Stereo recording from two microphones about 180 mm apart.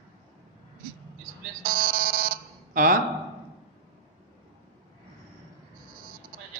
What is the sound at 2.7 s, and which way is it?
Speech, 50° right (ahead or behind).